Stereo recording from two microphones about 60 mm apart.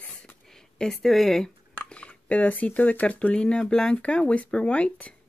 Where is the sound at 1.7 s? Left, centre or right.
Centre.